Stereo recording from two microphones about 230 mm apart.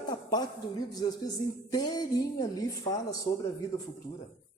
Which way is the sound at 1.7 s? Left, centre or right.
Centre.